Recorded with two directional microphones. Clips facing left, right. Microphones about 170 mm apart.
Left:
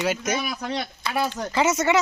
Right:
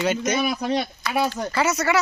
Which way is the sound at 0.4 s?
25° right (ahead or behind).